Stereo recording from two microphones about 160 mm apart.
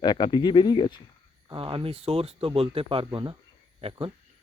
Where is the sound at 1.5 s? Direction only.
30° right (ahead or behind).